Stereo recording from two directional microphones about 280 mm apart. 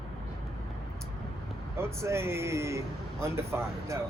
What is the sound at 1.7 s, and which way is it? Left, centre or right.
A man's voice, centre.